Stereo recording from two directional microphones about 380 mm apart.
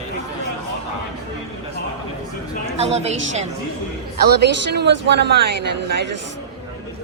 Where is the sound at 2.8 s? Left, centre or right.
Centre.